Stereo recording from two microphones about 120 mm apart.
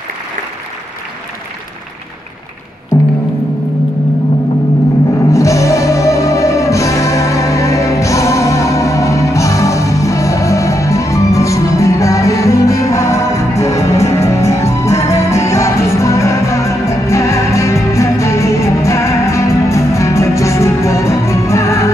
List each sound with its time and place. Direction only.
5.3 s music: 25° left (ahead or behind)